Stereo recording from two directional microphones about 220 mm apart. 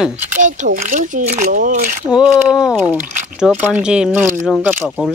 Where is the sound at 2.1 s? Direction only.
5° right (ahead or behind).